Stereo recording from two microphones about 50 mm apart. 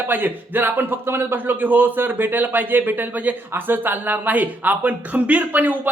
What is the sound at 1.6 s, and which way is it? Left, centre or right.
A man's voice, right.